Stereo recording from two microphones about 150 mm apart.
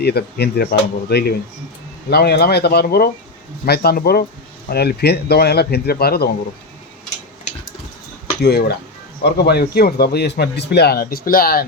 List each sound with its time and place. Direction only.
0.0 s a man's voice: 90° left
8.4 s a man's voice: 90° left